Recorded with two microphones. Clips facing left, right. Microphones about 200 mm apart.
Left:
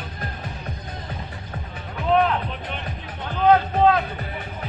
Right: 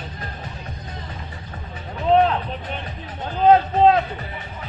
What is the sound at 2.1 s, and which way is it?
Music, 25° right (ahead or behind).